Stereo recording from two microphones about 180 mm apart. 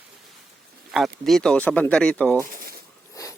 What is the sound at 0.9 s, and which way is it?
Speech, centre (ahead or behind).